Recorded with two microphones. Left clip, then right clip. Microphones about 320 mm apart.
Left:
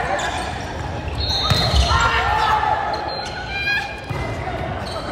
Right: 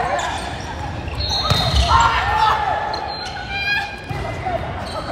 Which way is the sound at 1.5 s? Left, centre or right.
Centre.